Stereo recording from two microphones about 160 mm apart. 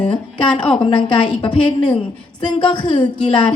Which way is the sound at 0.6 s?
35° left (ahead or behind).